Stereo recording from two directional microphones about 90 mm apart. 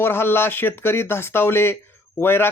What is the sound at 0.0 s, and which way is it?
Speech, 25° left (ahead or behind).